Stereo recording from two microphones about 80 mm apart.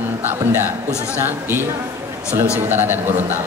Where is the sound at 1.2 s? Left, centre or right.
Right.